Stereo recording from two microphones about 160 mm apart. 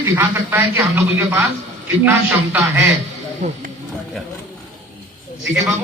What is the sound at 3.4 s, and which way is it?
Speech, 50° right (ahead or behind).